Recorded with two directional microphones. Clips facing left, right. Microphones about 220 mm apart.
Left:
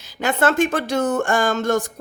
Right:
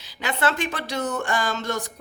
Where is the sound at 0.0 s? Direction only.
45° left (ahead or behind).